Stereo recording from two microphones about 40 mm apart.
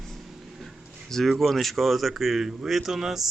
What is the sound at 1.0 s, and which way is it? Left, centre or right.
Speech, centre.